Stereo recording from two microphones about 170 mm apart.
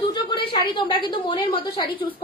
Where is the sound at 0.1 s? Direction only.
30° left (ahead or behind).